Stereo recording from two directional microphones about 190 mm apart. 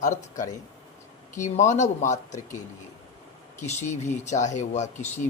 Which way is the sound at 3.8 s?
35° left (ahead or behind).